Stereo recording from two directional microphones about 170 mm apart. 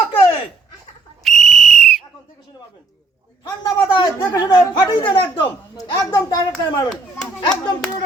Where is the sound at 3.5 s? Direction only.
25° left (ahead or behind).